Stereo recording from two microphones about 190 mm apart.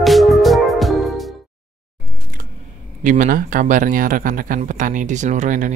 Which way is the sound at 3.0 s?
45° right (ahead or behind).